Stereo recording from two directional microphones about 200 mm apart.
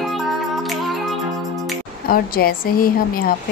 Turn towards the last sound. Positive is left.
turn(degrees=45)  # may be behind; listen again after turning